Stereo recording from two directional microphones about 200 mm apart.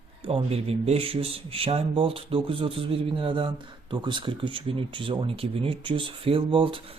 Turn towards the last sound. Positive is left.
turn(degrees=-25)  # may be behind; listen again after turning